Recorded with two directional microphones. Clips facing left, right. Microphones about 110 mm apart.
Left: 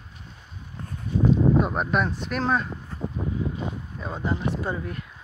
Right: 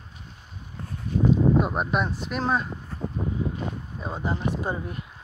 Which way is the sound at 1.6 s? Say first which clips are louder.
Left 1 dB; 5° right (ahead or behind).